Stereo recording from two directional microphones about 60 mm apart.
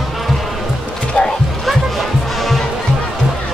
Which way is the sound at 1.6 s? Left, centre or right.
Centre.